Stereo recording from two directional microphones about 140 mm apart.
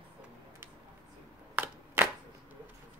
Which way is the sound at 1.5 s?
15° right (ahead or behind).